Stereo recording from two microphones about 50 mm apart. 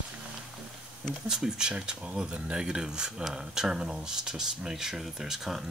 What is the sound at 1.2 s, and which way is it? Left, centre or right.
Speech, centre.